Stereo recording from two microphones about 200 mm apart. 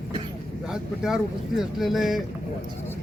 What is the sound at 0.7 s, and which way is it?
Speech, centre (ahead or behind).